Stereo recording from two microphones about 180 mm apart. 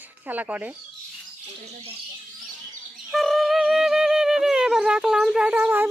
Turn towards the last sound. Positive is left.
turn(degrees=-10)  # may be behind; listen again after turning